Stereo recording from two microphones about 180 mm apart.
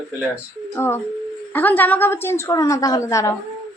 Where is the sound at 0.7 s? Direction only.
15° left (ahead or behind).